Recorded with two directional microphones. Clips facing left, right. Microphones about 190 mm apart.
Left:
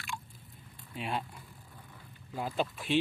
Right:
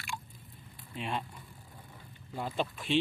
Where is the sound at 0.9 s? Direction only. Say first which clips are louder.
Even; 5° left (ahead or behind).